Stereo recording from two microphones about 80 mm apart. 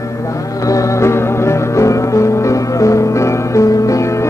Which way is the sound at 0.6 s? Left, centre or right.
Left.